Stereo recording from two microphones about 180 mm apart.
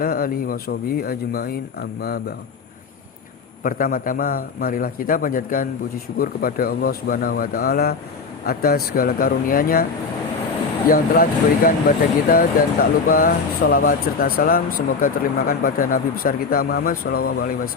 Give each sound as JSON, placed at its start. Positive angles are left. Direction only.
{"t": 0.0, "sound": "speech", "side_deg": 55}
{"t": 3.6, "sound": "speech", "side_deg": 50}
{"t": 10.8, "sound": "speech", "side_deg": 50}